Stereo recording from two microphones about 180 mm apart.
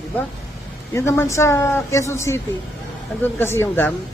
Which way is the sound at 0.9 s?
15° left (ahead or behind).